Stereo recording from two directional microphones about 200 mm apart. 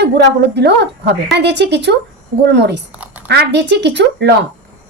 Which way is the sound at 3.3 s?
60° right (ahead or behind).